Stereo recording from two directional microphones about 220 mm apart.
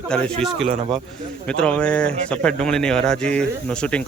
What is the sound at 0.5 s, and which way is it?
Speech, 25° right (ahead or behind).